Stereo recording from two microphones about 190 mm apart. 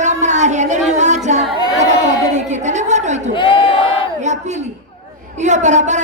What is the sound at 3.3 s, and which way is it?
Crowd, 25° left (ahead or behind).